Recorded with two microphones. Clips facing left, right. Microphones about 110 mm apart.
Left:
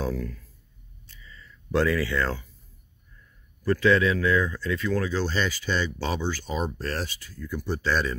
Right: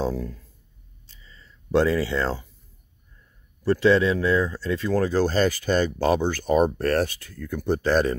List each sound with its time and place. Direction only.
0.0 s speech: 30° right (ahead or behind)
1.0 s a sound: 30° right (ahead or behind)
3.6 s speech: 25° right (ahead or behind); by 8.2 s 50° right (ahead or behind)